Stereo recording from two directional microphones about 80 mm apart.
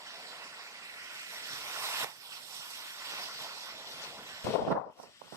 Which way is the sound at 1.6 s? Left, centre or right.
Right.